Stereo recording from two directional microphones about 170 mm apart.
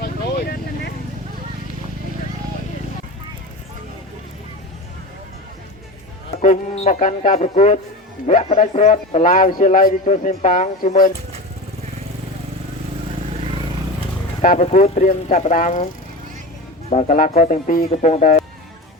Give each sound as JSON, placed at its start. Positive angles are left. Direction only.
{"t": 0.0, "sound": "vehicle", "side_deg": 65}
{"t": 6.7, "sound": "a man's voice", "side_deg": 45}
{"t": 14.4, "sound": "a man's voice", "side_deg": 45}
{"t": 16.9, "sound": "a man's voice", "side_deg": 45}